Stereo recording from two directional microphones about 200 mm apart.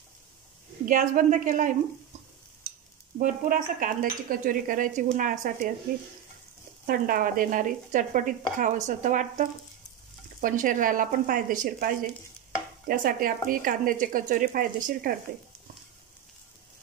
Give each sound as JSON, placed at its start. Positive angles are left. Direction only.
{"t": 0.8, "sound": "a woman's voice", "side_deg": -40}
{"t": 3.2, "sound": "speech", "side_deg": -40}
{"t": 6.9, "sound": "a woman's voice", "side_deg": -45}